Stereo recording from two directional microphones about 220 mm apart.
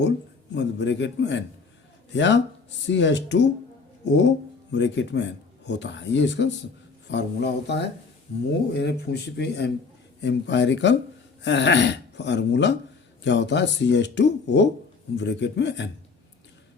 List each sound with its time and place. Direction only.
0.5 s speech: 55° left (ahead or behind)